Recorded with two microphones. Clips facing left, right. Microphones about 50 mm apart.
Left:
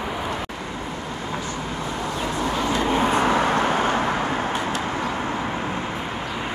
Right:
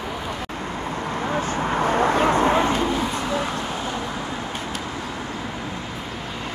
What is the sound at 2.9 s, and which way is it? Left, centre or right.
Vehicle, left.